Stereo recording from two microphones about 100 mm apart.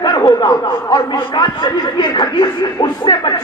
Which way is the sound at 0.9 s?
45° left (ahead or behind).